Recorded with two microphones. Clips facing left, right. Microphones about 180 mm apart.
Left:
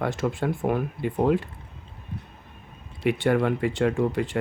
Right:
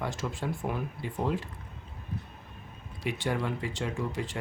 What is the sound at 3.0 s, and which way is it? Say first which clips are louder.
Speech: left 9 dB; 60° left (ahead or behind).